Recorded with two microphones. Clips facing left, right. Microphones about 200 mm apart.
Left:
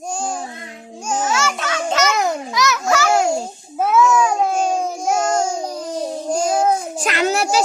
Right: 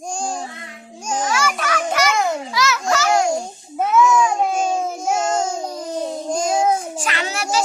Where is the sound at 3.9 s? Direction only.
10° left (ahead or behind).